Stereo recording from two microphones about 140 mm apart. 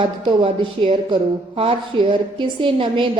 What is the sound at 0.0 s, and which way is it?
A woman's voice, 35° right (ahead or behind).